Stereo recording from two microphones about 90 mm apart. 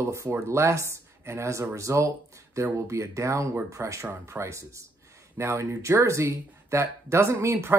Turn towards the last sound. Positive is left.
turn(degrees=-30)  # may be behind; listen again after turning